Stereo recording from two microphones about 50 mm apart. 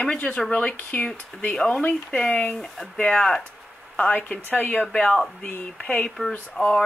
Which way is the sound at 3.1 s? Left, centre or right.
Centre.